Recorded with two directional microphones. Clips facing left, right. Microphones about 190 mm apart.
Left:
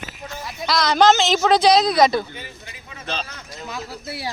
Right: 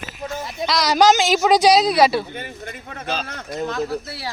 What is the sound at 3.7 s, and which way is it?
Speech, 10° left (ahead or behind).